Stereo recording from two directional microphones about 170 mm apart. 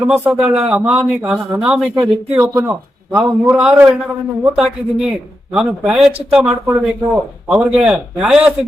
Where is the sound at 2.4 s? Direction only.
20° right (ahead or behind).